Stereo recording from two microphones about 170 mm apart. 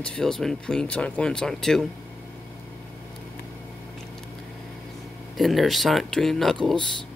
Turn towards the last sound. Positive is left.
turn(degrees=5)  # may be behind; listen again after turning